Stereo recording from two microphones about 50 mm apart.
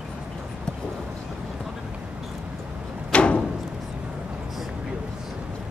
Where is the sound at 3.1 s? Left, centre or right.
Left.